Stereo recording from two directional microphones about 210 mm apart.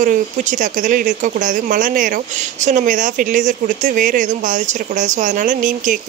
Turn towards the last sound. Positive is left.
turn(degrees=-40)  # may be behind; listen again after turning